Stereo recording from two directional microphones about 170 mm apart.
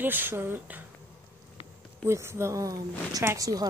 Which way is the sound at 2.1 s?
15° right (ahead or behind).